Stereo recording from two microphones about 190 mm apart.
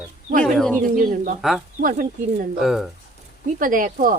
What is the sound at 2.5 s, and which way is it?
Speech, centre (ahead or behind).